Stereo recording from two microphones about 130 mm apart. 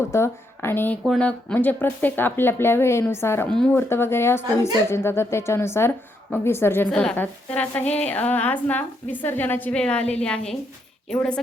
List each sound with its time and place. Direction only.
0.1 s a woman's voice: 20° left (ahead or behind)
1.0 s a woman's voice: 5° left (ahead or behind)
3.5 s a woman's voice: 5° left (ahead or behind)
3.8 s a woman's voice: 20° left (ahead or behind)
6.9 s a woman's voice: 5° left (ahead or behind)